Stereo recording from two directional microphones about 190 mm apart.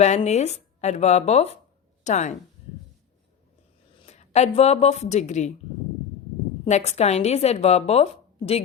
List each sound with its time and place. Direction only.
0.2 s speech: 35° left (ahead or behind)
4.0 s a woman's voice: 35° left (ahead or behind)
6.7 s speech: 35° left (ahead or behind)